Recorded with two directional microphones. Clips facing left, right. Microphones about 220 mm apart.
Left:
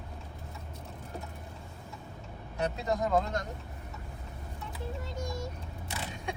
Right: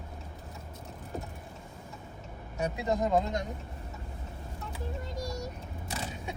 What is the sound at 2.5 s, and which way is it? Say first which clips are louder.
Speech: right 1 dB; 10° right (ahead or behind).